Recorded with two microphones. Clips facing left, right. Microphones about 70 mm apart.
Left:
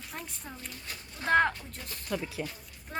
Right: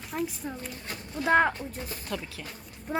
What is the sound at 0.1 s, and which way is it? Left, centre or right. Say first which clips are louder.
Speech: right 12 dB; centre.